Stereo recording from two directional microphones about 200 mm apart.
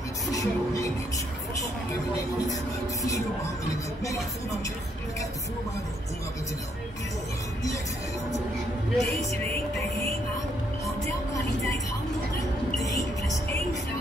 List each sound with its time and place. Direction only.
0.3 s music: 15° left (ahead or behind)
8.9 s speech: centre (ahead or behind)
12.8 s music: 15° left (ahead or behind)